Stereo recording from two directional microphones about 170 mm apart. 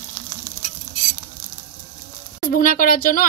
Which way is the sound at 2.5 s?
55° left (ahead or behind).